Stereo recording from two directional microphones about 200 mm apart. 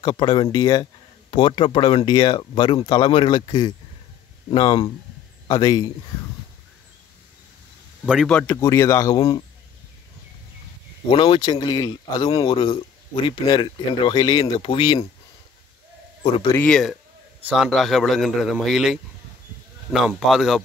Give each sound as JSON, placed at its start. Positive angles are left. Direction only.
{"t": 0.0, "sound": "speech", "side_deg": 25}
{"t": 8.0, "sound": "a man's voice", "side_deg": 0}
{"t": 8.5, "sound": "speech", "side_deg": 15}
{"t": 11.1, "sound": "speech", "side_deg": 25}
{"t": 16.2, "sound": "speech", "side_deg": 30}
{"t": 16.5, "sound": "a man's voice", "side_deg": 5}